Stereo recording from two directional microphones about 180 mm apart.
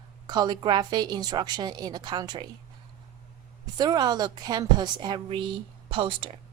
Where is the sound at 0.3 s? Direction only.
20° right (ahead or behind).